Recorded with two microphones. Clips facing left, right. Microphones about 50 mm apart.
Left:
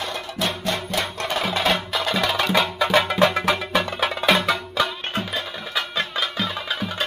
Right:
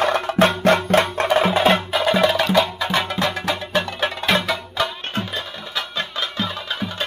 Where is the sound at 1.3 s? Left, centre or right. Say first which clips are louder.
Right 6 dB; right.